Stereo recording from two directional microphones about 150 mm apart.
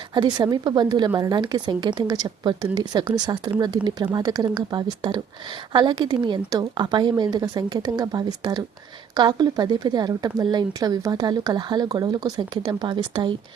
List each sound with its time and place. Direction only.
0.1 s speech: 30° right (ahead or behind)